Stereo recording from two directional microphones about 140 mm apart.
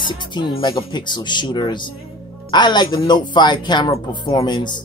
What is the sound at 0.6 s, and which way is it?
Speech, 35° left (ahead or behind).